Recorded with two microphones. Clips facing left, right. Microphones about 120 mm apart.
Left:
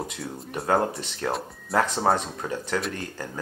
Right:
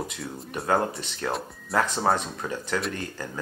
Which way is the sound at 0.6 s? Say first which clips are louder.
Left 1 dB; 25° left (ahead or behind).